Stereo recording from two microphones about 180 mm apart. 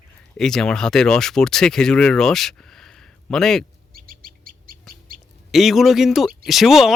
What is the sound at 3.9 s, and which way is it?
Bird, 50° right (ahead or behind).